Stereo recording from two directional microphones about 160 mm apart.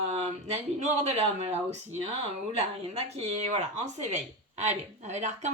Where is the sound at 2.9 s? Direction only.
40° right (ahead or behind).